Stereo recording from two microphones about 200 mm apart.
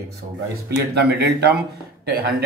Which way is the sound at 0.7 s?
55° right (ahead or behind).